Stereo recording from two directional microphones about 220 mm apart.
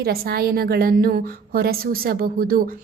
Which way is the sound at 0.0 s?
45° right (ahead or behind).